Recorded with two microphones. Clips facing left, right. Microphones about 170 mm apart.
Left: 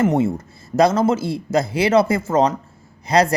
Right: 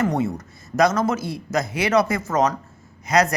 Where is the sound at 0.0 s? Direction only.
25° left (ahead or behind).